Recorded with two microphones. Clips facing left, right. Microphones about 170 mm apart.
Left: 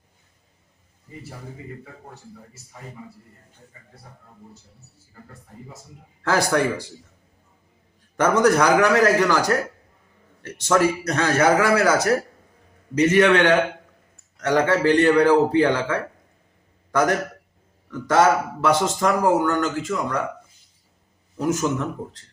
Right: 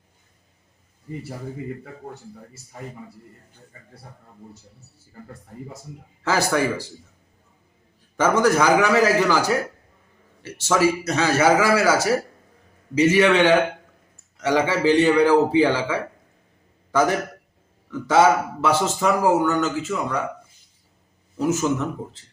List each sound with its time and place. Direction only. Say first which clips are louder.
6.2 s speech: left 1 dB; 5° right (ahead or behind)
8.1 s a man's voice: left 1 dB; 5° right (ahead or behind)
16.9 s a man's voice: even; 5° right (ahead or behind)
21.4 s a man's voice: right 1 dB; 10° right (ahead or behind)